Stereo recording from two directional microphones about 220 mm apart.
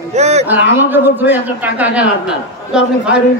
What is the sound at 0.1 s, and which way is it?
Speech, 30° right (ahead or behind).